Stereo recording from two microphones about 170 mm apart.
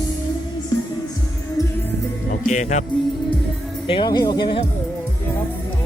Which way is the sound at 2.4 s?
45° left (ahead or behind).